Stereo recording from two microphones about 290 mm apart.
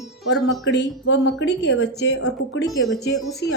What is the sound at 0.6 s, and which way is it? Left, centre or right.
A woman's voice, left.